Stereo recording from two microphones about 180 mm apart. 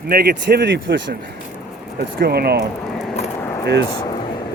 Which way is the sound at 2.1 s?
60° right (ahead or behind).